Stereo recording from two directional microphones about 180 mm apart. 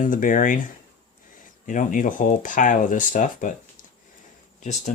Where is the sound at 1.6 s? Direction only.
45° left (ahead or behind).